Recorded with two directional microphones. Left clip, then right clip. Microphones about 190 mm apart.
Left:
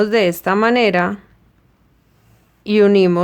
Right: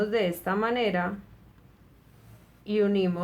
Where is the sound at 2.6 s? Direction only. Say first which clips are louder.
Left 13 dB; 55° left (ahead or behind).